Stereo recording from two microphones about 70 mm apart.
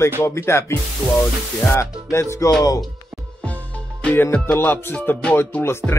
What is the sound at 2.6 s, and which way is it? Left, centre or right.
Speech, left.